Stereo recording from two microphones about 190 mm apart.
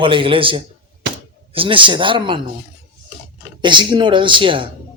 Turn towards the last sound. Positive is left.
turn(degrees=-25)  # may be behind; listen again after turning